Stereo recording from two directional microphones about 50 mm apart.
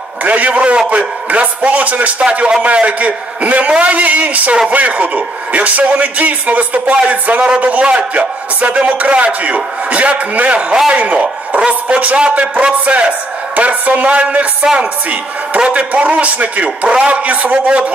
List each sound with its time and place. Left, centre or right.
0.2 s a man's voice: right
14.6 s a man's voice: centre